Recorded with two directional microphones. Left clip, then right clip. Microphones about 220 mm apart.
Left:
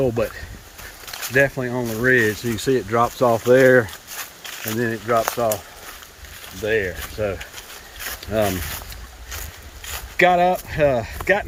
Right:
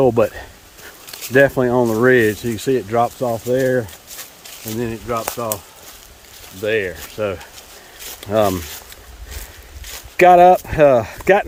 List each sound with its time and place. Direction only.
0.2 s speech: 15° right (ahead or behind)
1.3 s speech: 25° right (ahead or behind); by 3.1 s 5° right (ahead or behind)
3.2 s speech: 15° left (ahead or behind)
6.7 s speech: 5° right (ahead or behind)
10.2 s speech: 20° right (ahead or behind)